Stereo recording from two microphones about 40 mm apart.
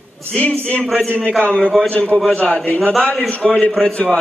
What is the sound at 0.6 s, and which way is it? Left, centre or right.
Speech, left.